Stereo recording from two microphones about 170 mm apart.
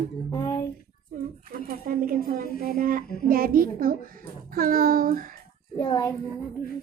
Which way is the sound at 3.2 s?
55° right (ahead or behind).